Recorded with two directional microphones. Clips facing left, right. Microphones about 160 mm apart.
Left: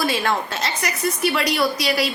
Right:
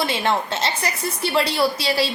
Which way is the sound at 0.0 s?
25° right (ahead or behind).